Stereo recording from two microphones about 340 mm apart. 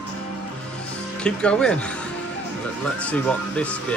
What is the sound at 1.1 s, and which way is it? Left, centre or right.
Speech, centre.